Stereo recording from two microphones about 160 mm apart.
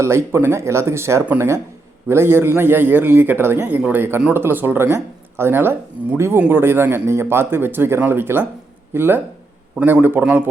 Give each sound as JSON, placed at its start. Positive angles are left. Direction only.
{"t": 0.0, "sound": "speech", "side_deg": -15}